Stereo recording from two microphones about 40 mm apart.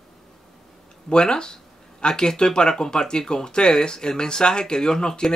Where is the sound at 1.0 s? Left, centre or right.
Left.